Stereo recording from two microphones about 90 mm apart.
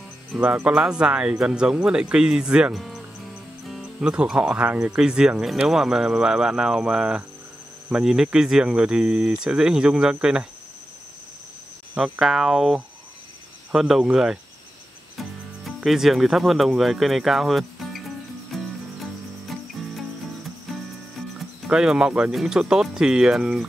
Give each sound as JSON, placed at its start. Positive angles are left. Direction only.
{"t": 0.4, "sound": "speech", "side_deg": -15}
{"t": 12.0, "sound": "speech", "side_deg": -5}
{"t": 18.5, "sound": "cricket", "side_deg": 0}
{"t": 21.6, "sound": "speech", "side_deg": -10}